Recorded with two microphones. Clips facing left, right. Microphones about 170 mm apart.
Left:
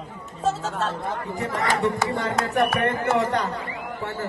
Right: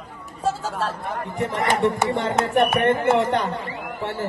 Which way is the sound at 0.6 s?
5° right (ahead or behind).